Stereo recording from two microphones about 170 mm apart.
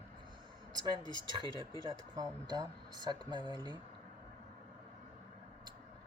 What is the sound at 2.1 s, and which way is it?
Speech, 25° right (ahead or behind).